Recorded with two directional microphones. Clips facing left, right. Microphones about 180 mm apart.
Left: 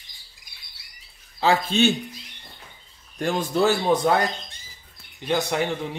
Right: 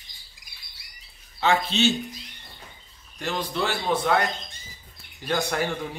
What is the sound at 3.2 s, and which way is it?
Speech, 45° left (ahead or behind).